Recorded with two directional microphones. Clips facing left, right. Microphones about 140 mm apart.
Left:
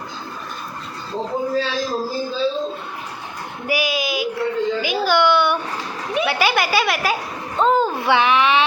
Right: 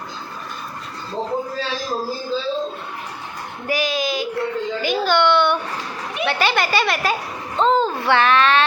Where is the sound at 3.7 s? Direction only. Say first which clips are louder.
Even; 10° left (ahead or behind).